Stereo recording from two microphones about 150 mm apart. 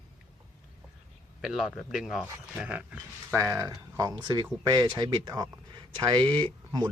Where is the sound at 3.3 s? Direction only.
20° right (ahead or behind).